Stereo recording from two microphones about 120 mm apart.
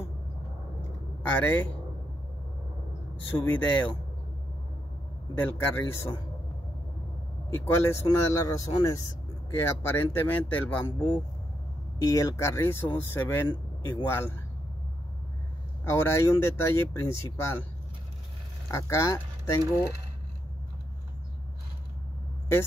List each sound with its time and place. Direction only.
1.2 s speech: 15° left (ahead or behind)
3.4 s speech: 15° left (ahead or behind)
5.4 s speech: 20° left (ahead or behind)
7.5 s speech: 20° left (ahead or behind)
12.0 s speech: 30° left (ahead or behind)
15.9 s speech: 25° left (ahead or behind)
18.7 s speech: 25° left (ahead or behind)